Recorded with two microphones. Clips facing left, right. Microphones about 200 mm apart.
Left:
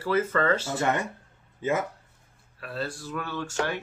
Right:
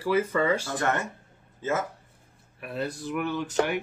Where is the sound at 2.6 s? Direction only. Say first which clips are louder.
Right 2 dB; 20° right (ahead or behind).